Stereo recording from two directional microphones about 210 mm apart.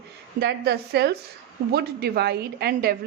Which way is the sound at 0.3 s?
50° right (ahead or behind).